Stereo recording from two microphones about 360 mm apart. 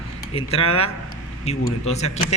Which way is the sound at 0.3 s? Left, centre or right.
Centre.